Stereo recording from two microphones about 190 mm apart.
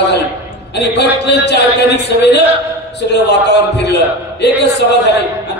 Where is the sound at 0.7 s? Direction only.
60° left (ahead or behind).